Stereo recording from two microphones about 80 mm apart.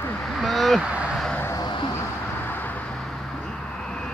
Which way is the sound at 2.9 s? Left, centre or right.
Centre.